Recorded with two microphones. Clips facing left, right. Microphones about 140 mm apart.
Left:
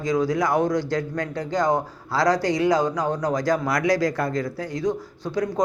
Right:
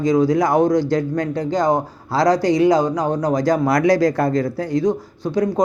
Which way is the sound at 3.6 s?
30° right (ahead or behind).